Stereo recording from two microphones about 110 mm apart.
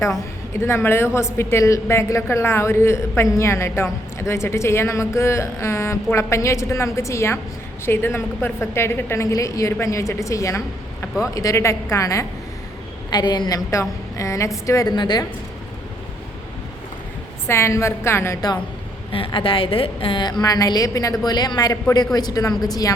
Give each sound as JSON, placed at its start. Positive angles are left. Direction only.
{"t": 0.5, "sound": "a woman's voice", "side_deg": 25}
{"t": 13.1, "sound": "a woman's voice", "side_deg": 40}
{"t": 14.9, "sound": "a woman's voice", "side_deg": 40}
{"t": 17.4, "sound": "a woman's voice", "side_deg": 25}
{"t": 19.1, "sound": "a woman's voice", "side_deg": 55}
{"t": 20.4, "sound": "a woman's voice", "side_deg": 35}